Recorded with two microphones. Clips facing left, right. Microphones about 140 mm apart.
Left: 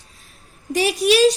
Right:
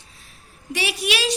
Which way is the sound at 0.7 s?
45° left (ahead or behind).